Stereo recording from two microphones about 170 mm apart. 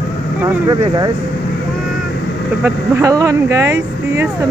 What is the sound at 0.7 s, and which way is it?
Speech, 25° right (ahead or behind).